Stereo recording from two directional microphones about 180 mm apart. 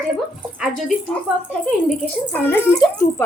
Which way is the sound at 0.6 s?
Centre (ahead or behind).